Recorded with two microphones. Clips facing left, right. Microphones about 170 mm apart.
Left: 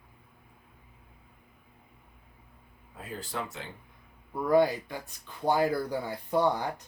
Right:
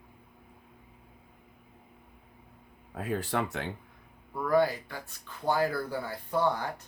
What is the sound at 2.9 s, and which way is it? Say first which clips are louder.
Speech: right 7 dB; 65° right (ahead or behind).